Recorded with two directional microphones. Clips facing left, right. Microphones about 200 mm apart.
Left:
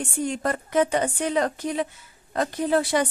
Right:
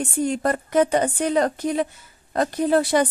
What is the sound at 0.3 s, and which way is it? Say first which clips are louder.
A woman's voice: right 4 dB; 40° right (ahead or behind).